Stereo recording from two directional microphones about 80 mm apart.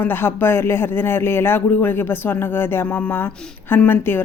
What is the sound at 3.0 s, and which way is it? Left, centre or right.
Speech, centre.